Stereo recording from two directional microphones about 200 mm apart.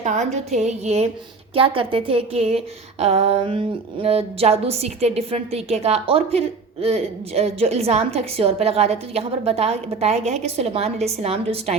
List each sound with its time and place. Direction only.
0.0 s a woman's voice: 35° right (ahead or behind)